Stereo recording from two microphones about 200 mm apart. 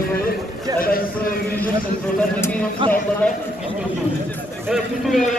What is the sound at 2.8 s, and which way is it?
Speech, 25° right (ahead or behind).